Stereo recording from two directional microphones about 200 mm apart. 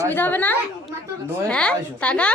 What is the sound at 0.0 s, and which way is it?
A woman's voice, 10° left (ahead or behind).